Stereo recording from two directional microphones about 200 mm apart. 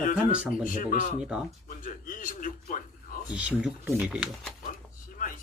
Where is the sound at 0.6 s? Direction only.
40° left (ahead or behind).